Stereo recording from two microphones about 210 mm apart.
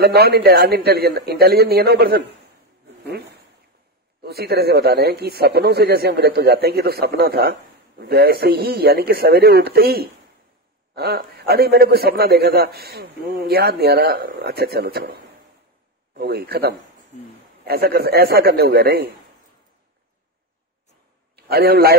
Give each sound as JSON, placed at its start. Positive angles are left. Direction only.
{"t": 0.0, "sound": "a man's voice", "side_deg": -50}
{"t": 4.2, "sound": "a man's voice", "side_deg": -50}
{"t": 16.2, "sound": "a man's voice", "side_deg": -50}
{"t": 21.4, "sound": "a man's voice", "side_deg": -50}